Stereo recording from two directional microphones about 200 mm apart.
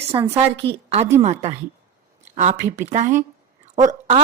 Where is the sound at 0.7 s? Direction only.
30° right (ahead or behind).